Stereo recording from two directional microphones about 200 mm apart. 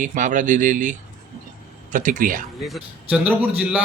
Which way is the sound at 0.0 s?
40° right (ahead or behind).